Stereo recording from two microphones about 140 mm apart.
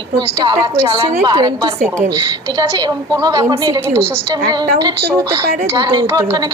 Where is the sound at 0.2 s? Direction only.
30° right (ahead or behind).